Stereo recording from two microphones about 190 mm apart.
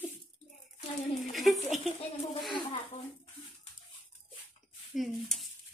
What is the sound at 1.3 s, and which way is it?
Speech, centre (ahead or behind).